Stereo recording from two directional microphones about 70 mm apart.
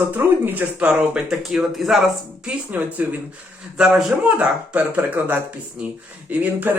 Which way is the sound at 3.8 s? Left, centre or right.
Centre.